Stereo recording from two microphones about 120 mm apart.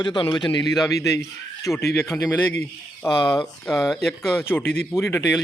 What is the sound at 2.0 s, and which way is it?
Speech, 15° left (ahead or behind).